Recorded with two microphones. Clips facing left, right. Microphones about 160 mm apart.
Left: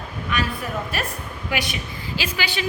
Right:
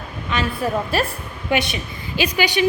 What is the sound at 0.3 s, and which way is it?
A woman's voice, 25° right (ahead or behind).